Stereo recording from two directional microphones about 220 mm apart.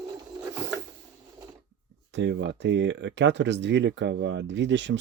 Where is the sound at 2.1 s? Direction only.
55° right (ahead or behind).